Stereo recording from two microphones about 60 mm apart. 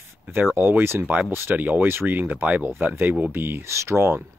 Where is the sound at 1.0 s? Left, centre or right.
Right.